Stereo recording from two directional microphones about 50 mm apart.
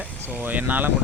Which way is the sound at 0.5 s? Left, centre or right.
Right.